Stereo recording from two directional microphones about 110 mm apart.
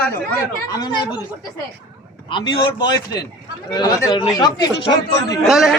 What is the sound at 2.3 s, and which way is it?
A man's voice, 45° left (ahead or behind).